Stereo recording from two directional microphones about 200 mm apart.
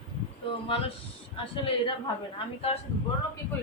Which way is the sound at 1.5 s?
25° left (ahead or behind).